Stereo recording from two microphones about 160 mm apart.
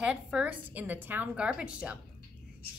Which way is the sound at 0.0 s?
5° right (ahead or behind).